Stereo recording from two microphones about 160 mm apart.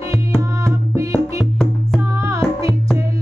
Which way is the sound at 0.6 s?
20° right (ahead or behind).